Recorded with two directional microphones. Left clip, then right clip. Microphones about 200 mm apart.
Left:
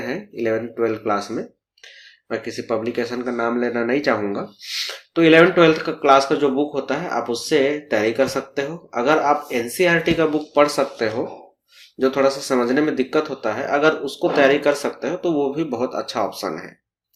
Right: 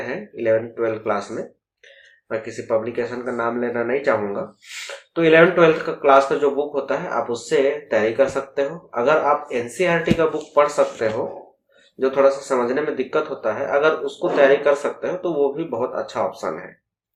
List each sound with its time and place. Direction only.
0.1 s speech: 50° left (ahead or behind)
2.3 s speech: 50° left (ahead or behind)